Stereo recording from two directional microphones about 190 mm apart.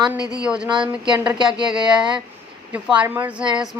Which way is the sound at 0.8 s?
5° right (ahead or behind).